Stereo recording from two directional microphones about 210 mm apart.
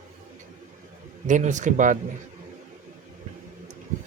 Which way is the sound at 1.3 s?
35° right (ahead or behind).